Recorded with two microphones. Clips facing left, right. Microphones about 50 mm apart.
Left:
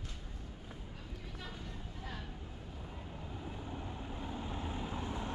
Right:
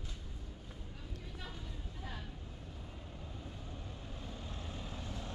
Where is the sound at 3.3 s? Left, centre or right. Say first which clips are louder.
Left 7 dB; left.